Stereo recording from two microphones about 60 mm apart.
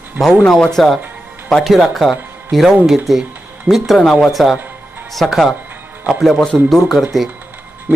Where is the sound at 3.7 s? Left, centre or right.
Left.